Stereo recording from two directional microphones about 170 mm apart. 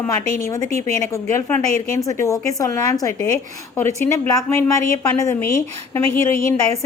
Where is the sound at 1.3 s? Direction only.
15° left (ahead or behind).